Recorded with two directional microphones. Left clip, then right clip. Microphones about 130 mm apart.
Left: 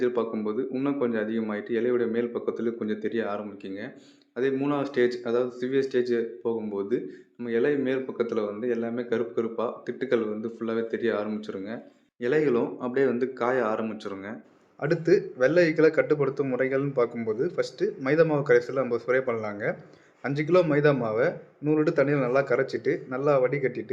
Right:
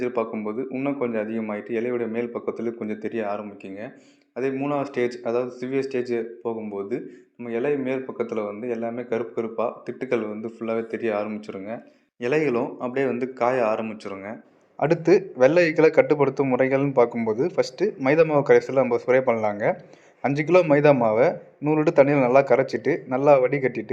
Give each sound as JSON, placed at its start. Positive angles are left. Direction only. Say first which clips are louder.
{"t": 0.0, "sound": "speech", "louder": "right 1 dB", "side_deg": -15}
{"t": 14.8, "sound": "a man's voice", "louder": "right 4 dB", "side_deg": -40}